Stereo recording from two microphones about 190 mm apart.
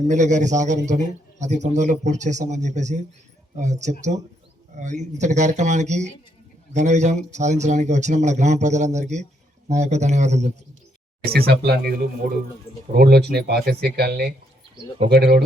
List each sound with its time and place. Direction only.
0.1 s a man's voice: 40° right (ahead or behind)
11.3 s speech: 55° right (ahead or behind)